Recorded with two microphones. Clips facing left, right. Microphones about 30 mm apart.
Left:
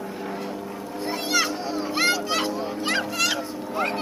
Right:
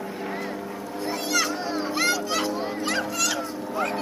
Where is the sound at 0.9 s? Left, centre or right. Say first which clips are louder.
Left 1 dB; centre.